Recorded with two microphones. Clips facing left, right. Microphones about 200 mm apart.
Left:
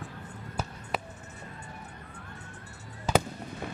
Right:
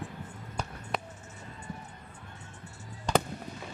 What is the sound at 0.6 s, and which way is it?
Basketball bounce, 5° left (ahead or behind).